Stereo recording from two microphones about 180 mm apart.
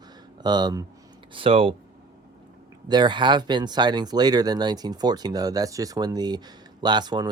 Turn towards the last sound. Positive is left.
turn(degrees=-25)  # may be behind; listen again after turning